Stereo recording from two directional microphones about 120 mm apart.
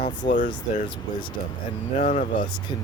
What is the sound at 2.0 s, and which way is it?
Speech, 90° left.